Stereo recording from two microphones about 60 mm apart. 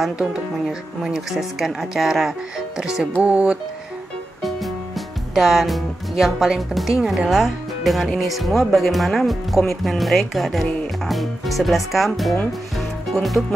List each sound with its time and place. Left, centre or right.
0.2 s speech: centre
2.8 s music: centre
3.2 s speech: centre
4.4 s speech: centre
12.7 s music: centre